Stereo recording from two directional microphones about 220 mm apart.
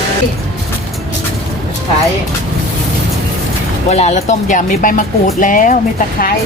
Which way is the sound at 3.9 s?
30° left (ahead or behind).